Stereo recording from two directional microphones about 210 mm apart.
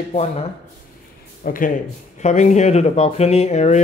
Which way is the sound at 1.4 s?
40° left (ahead or behind).